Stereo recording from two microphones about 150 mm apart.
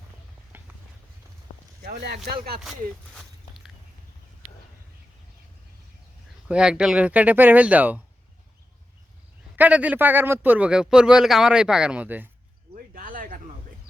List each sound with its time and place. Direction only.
0.5 s a sound: 15° right (ahead or behind)
1.8 s speech: 90° right
3.2 s walk: centre (ahead or behind)
6.5 s a man's voice: 5° right (ahead or behind)
9.6 s a man's voice: 10° right (ahead or behind)
12.7 s speech: 70° right (ahead or behind)